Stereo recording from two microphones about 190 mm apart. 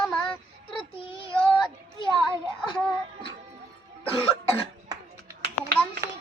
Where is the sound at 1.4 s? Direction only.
5° left (ahead or behind).